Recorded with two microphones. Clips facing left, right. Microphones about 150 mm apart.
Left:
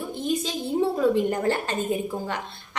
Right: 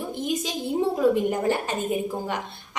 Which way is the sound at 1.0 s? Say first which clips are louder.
Right 2 dB; 10° right (ahead or behind).